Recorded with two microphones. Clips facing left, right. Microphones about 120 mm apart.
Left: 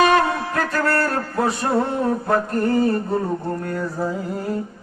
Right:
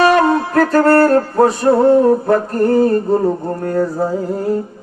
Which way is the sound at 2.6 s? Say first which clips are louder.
Right 7 dB; 40° right (ahead or behind).